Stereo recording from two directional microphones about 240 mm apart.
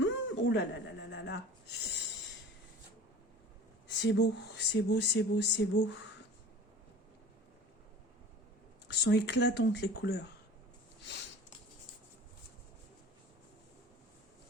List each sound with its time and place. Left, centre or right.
0.0 s a sound: left
3.8 s speech: left
8.9 s speech: left